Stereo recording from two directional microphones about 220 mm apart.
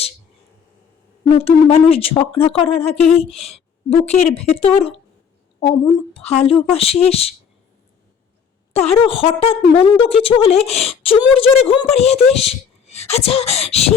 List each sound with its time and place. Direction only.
1.3 s a woman's voice: 25° left (ahead or behind)
8.7 s speech: 25° left (ahead or behind)